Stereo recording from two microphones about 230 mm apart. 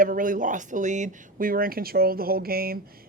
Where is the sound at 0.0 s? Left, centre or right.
Right.